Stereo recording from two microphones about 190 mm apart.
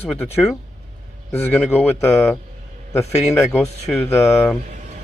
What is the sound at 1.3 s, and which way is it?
Speech, 10° left (ahead or behind).